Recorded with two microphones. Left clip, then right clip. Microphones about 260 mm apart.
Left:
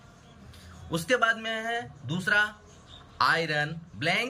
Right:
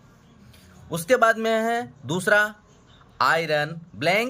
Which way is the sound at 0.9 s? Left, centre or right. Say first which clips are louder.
Right 6 dB; centre.